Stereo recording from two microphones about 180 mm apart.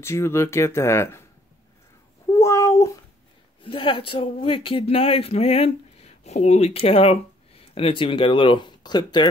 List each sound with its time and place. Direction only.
0.0 s speech: 15° left (ahead or behind)
2.3 s a sound: 15° left (ahead or behind)
3.6 s speech: 30° left (ahead or behind)